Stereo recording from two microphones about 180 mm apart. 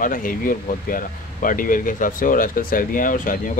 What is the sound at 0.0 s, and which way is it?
Speech, 50° left (ahead or behind).